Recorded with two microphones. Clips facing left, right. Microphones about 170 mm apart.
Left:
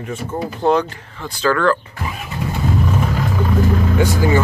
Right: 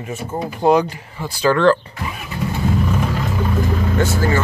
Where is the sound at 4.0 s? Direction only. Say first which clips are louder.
Left 2 dB; 15° left (ahead or behind).